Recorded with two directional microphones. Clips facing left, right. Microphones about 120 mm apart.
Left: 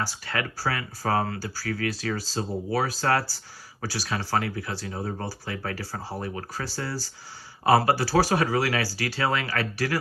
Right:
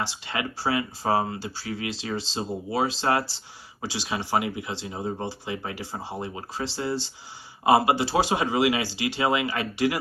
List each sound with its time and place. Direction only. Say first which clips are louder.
0.0 s speech: even; 20° right (ahead or behind)